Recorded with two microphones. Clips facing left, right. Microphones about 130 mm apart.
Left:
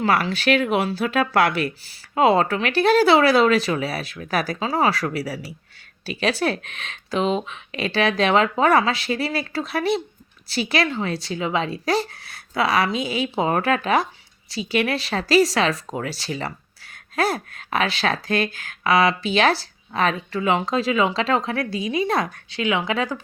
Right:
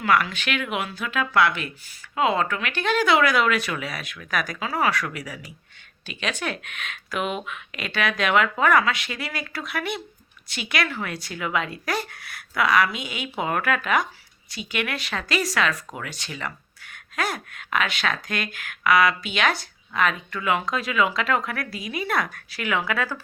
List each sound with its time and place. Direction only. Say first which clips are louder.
0.0 s speech: left 2 dB; 30° left (ahead or behind)